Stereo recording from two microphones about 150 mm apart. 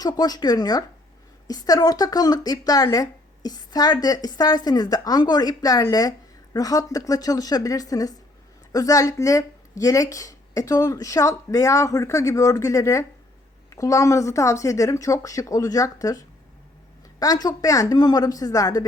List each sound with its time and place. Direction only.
0.0 s speech: 25° left (ahead or behind)